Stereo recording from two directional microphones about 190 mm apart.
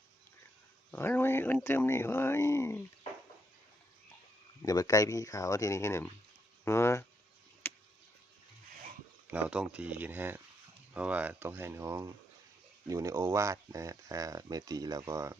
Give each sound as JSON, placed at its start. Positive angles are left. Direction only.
{"t": 0.9, "sound": "speech", "side_deg": 10}
{"t": 4.6, "sound": "speech", "side_deg": 20}
{"t": 6.7, "sound": "a sound", "side_deg": 15}
{"t": 9.3, "sound": "speech", "side_deg": -5}